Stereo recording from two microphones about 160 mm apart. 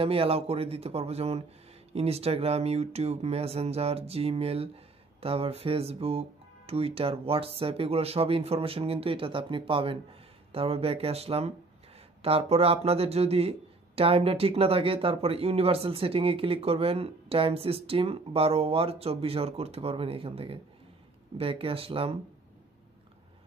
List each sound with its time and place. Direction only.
0.0 s speech: 35° right (ahead or behind)